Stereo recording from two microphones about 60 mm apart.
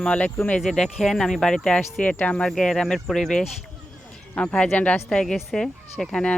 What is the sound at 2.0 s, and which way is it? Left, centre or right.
Speech, left.